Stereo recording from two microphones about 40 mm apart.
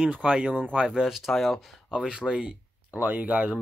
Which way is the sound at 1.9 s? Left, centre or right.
Right.